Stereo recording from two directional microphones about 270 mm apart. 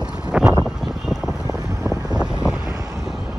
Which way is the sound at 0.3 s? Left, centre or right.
Centre.